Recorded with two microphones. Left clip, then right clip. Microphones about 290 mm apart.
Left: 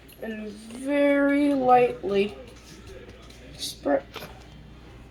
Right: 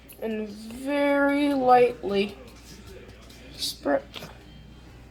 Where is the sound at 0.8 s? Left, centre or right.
Right.